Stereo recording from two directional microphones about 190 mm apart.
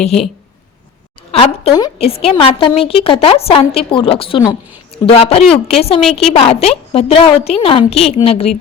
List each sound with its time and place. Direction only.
0.0 s a woman's voice: 35° left (ahead or behind)
1.3 s a woman's voice: 30° left (ahead or behind)